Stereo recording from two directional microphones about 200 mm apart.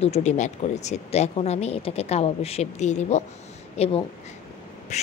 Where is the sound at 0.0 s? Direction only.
35° left (ahead or behind).